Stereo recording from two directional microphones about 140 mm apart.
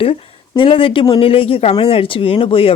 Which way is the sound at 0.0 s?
40° left (ahead or behind).